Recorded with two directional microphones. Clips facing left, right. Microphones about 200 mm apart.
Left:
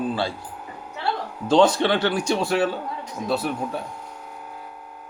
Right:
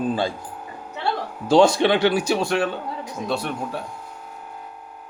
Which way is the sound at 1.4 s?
10° right (ahead or behind).